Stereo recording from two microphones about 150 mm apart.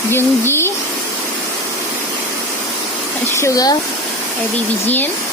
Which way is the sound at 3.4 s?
20° left (ahead or behind).